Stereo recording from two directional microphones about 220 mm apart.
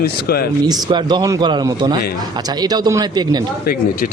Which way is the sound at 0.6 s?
20° right (ahead or behind).